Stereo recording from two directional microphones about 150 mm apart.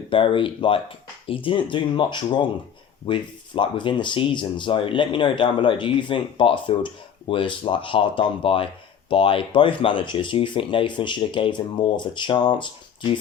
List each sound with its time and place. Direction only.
0.1 s speech: 35° left (ahead or behind)